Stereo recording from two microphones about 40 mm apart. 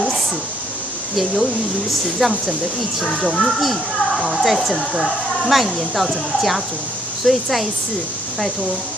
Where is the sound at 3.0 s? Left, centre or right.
Left.